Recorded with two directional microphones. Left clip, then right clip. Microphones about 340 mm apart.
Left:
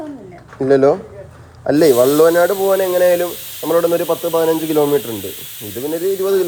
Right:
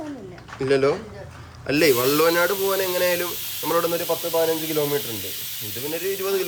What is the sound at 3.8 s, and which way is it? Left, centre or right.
Speech, left.